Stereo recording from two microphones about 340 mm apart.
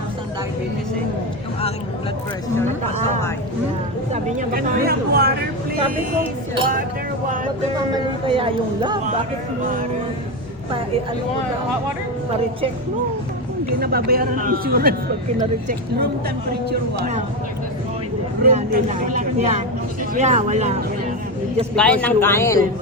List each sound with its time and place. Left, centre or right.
4.1 s a woman's voice: right
7.9 s speech: centre
13.7 s a woman's voice: right
18.5 s a woman's voice: right
21.8 s a man's voice: centre